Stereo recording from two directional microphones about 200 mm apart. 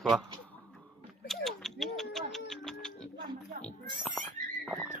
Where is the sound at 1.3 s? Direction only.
Centre (ahead or behind).